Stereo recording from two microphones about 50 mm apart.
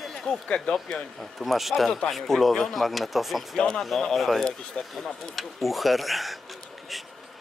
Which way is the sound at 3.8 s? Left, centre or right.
Centre.